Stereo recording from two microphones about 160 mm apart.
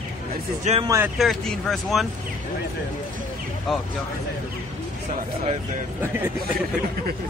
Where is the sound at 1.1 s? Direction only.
Centre (ahead or behind).